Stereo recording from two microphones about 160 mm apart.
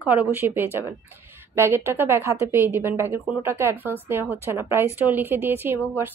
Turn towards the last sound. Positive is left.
turn(degrees=-15)  # may be behind; listen again after turning